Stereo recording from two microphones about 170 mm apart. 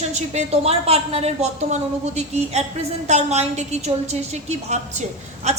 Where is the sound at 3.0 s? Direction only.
40° right (ahead or behind).